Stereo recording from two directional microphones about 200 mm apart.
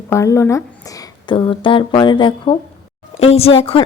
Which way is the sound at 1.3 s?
25° left (ahead or behind).